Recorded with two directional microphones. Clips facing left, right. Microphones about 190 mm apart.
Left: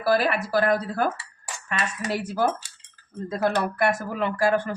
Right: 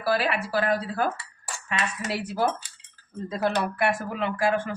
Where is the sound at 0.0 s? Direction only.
45° left (ahead or behind).